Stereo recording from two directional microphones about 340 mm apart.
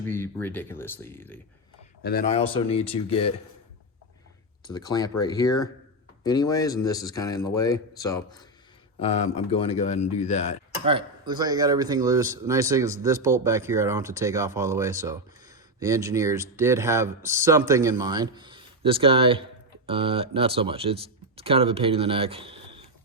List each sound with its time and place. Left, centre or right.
0.0 s speech: centre
2.0 s speech: left
4.6 s speech: centre
10.8 s speech: centre